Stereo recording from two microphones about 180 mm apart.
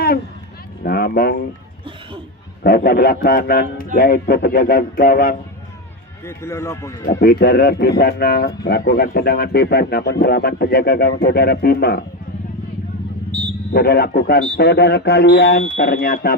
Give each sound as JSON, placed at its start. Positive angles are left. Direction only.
{"t": 0.9, "sound": "speech", "side_deg": 55}
{"t": 2.6, "sound": "speech", "side_deg": 55}
{"t": 6.2, "sound": "speech", "side_deg": 15}
{"t": 7.2, "sound": "speech", "side_deg": 60}
{"t": 13.3, "sound": "a sound", "side_deg": -25}
{"t": 13.7, "sound": "speech", "side_deg": 60}